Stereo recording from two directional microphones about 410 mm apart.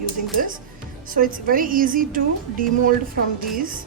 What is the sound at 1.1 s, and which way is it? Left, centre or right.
A woman's voice, centre.